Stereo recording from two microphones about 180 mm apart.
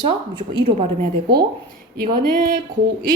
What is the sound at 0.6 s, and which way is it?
Speech, 40° right (ahead or behind).